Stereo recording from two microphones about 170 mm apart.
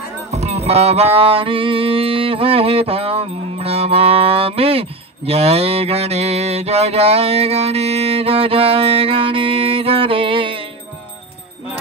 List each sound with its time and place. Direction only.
0.3 s music: 40° right (ahead or behind)